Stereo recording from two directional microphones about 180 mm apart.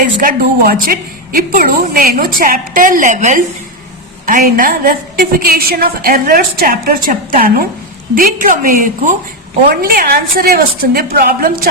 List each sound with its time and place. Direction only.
0.2 s a woman's voice: 55° right (ahead or behind)